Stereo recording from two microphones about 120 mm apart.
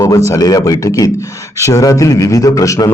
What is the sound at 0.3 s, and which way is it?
A man's voice, 30° left (ahead or behind).